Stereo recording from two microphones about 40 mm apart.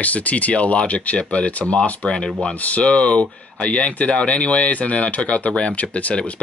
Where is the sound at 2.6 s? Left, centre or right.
Left.